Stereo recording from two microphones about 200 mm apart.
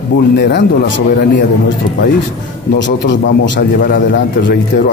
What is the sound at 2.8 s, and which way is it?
A man's voice, 60° left (ahead or behind).